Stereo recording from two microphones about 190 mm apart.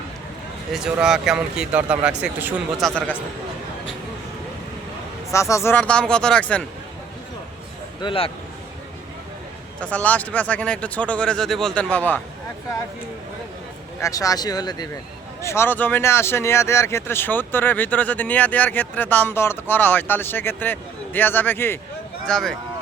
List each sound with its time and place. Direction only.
0.7 s speech: 5° right (ahead or behind)
5.3 s speech: 15° left (ahead or behind)
8.0 s speech: 30° left (ahead or behind)
9.8 s speech: 10° left (ahead or behind)
14.0 s speech: 20° left (ahead or behind)